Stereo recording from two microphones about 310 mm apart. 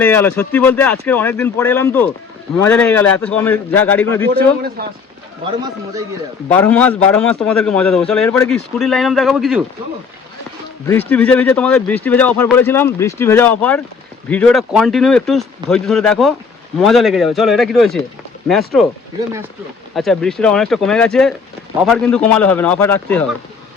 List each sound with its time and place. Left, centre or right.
0.0 s a man's voice: centre
4.8 s speech: right
6.5 s a man's voice: centre
10.8 s a man's voice: centre
20.0 s a man's voice: centre